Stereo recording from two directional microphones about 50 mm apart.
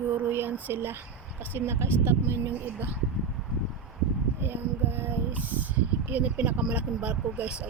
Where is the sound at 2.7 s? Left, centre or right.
Right.